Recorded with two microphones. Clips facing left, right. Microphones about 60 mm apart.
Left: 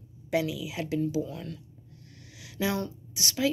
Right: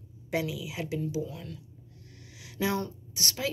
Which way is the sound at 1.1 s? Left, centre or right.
Centre.